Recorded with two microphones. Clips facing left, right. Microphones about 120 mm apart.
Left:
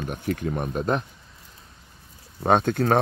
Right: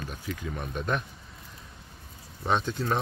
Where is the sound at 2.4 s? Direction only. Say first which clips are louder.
Left 8 dB; 55° left (ahead or behind).